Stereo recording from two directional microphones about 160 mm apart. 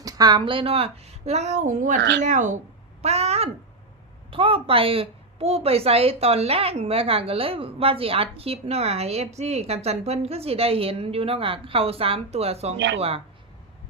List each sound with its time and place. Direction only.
0.0 s a woman's voice: 25° right (ahead or behind); by 2.0 s 50° right (ahead or behind)
2.0 s speech: 90° right
2.2 s a woman's voice: 50° right (ahead or behind)
12.7 s speech: 90° right
13.0 s a woman's voice: 35° right (ahead or behind)